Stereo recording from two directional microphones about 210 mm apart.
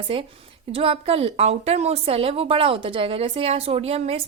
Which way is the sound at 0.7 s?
25° right (ahead or behind).